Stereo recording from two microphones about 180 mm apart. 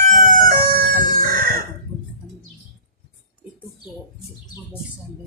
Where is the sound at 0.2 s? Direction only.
50° right (ahead or behind).